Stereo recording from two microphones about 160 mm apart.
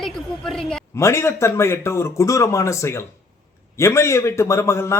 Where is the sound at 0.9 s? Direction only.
15° left (ahead or behind).